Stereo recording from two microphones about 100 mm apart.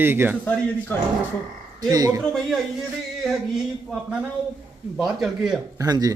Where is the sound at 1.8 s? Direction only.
40° right (ahead or behind).